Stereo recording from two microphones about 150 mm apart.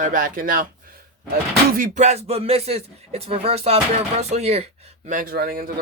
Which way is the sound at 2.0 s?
45° right (ahead or behind).